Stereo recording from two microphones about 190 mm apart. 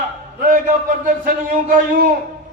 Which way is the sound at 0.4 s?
45° right (ahead or behind).